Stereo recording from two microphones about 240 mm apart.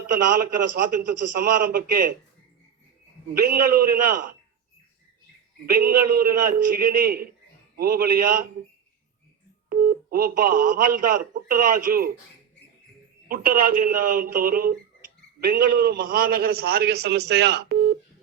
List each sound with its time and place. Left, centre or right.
0.1 s speech: right
3.4 s speech: right
5.6 s speech: right
9.6 s speech: right
13.2 s speech: right